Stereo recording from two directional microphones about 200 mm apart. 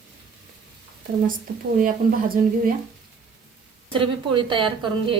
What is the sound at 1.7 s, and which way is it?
Speech, 40° right (ahead or behind).